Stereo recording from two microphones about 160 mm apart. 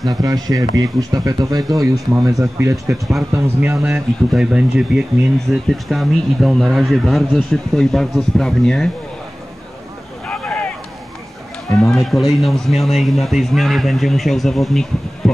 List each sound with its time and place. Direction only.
0.0 s speech: 25° right (ahead or behind)
3.7 s speech: 5° right (ahead or behind)
10.2 s boat: 5° left (ahead or behind)
11.8 s speech: centre (ahead or behind)